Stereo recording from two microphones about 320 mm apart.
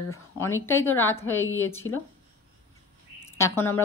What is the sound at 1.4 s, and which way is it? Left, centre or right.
Speech, left.